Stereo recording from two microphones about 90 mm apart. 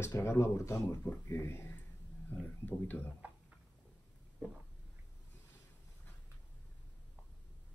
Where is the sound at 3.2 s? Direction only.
15° right (ahead or behind).